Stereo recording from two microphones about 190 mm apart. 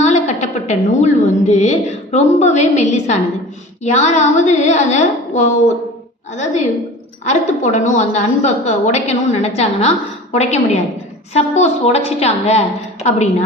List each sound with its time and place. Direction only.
0.0 s a woman's voice: 35° left (ahead or behind)